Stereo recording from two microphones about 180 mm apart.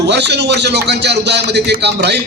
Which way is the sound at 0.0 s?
70° right (ahead or behind).